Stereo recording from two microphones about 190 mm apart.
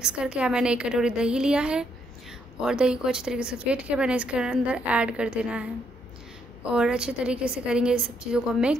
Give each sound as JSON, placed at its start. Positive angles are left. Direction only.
{"t": 0.0, "sound": "a woman's voice", "side_deg": -5}